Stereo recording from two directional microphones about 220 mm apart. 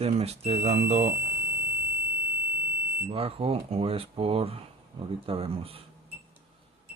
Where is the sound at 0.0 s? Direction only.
25° right (ahead or behind).